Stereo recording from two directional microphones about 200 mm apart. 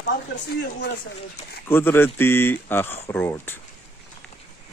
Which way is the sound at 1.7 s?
10° left (ahead or behind).